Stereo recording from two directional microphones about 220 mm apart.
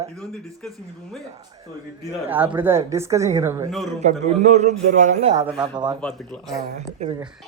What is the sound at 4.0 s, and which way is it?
A man's voice, 30° right (ahead or behind).